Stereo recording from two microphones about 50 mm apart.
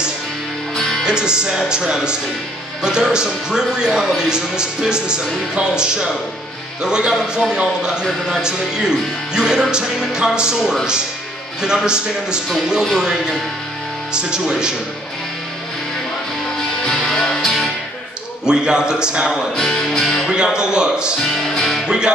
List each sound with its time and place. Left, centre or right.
0.7 s music: centre
1.0 s a man's voice: centre
16.8 s music: centre
18.4 s a man's voice: centre
19.5 s music: centre
20.2 s a sound: centre
21.3 s music: centre
21.8 s speech: centre